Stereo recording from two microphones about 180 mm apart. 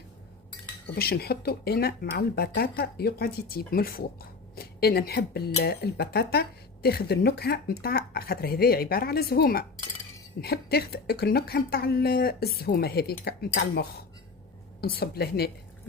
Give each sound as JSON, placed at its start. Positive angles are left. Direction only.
{"t": 0.9, "sound": "speech", "side_deg": 60}